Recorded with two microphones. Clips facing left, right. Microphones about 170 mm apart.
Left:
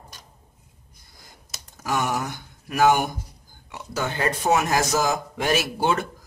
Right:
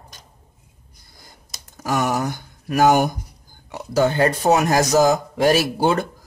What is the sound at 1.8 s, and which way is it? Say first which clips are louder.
Speech: right 4 dB; 40° right (ahead or behind).